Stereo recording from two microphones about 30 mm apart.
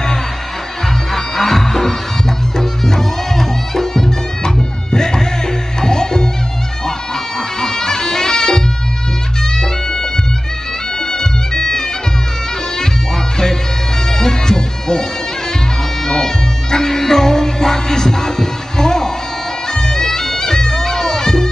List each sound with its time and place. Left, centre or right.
1.1 s music: centre
7.6 s bagpipes: centre
9.6 s music: left
14.1 s music: centre
16.1 s music: centre
19.7 s bagpipes: centre